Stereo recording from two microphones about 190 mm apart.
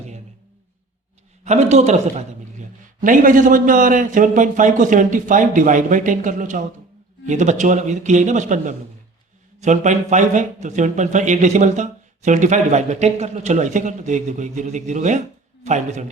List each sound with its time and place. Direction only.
1.5 s a man's voice: 35° right (ahead or behind)